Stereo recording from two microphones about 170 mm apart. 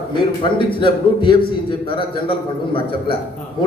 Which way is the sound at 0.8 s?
30° left (ahead or behind).